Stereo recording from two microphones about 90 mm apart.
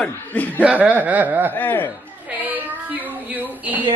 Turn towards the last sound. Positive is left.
turn(degrees=-20)  # may be behind; listen again after turning